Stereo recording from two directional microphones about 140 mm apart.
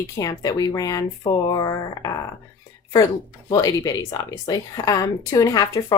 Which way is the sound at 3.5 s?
25° left (ahead or behind).